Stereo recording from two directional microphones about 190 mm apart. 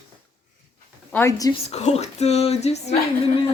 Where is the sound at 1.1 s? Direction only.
15° left (ahead or behind).